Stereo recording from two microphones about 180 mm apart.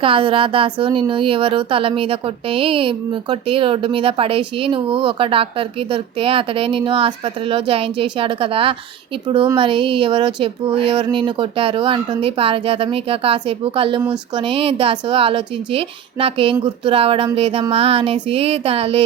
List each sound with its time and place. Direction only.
0.0 s a woman's voice: 30° right (ahead or behind)